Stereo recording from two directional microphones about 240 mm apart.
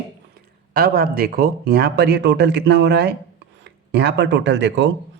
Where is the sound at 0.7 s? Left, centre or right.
Right.